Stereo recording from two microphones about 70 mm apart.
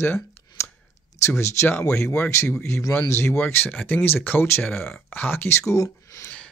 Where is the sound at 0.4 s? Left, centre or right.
Left.